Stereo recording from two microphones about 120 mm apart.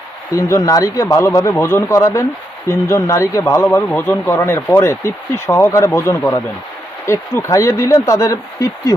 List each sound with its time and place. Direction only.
0.3 s speech: 25° left (ahead or behind)